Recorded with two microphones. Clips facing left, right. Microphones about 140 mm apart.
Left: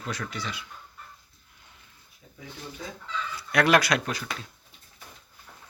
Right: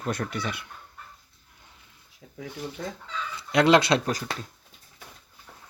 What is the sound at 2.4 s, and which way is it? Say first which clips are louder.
Speech: right 6 dB; 90° right.